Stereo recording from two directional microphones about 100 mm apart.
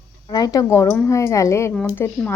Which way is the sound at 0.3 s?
40° left (ahead or behind).